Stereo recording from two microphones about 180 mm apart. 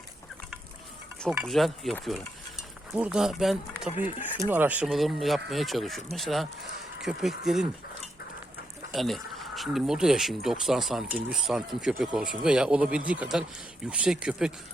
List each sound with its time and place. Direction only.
1.5 s speech: centre (ahead or behind)
3.8 s speech: 30° left (ahead or behind)
4.4 s speech: 10° right (ahead or behind)
8.9 s speech: centre (ahead or behind)